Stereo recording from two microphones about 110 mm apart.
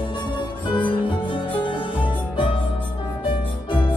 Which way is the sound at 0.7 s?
45° left (ahead or behind).